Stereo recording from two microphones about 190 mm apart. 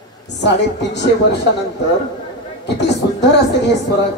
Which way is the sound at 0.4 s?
65° left (ahead or behind).